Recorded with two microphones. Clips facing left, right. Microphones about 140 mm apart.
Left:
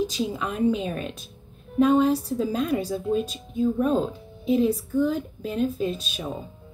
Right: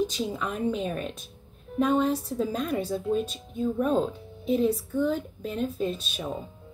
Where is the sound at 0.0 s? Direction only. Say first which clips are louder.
Left 2 dB; 10° left (ahead or behind).